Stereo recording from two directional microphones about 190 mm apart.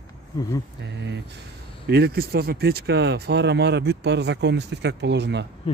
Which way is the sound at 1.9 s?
55° right (ahead or behind).